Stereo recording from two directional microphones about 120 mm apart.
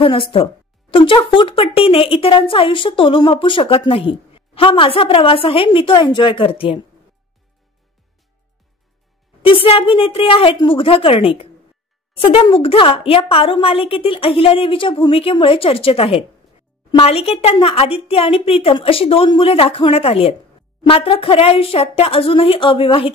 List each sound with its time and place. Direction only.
0.0 s speech: 45° left (ahead or behind)
9.4 s speech: 50° left (ahead or behind)